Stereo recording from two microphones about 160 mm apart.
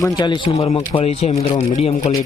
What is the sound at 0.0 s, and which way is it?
Speech, 25° left (ahead or behind).